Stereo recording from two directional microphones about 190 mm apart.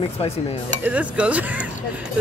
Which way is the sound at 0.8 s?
5° right (ahead or behind).